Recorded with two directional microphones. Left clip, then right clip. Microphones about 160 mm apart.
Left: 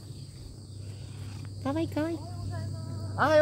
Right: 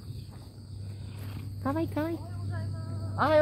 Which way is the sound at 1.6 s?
5° right (ahead or behind).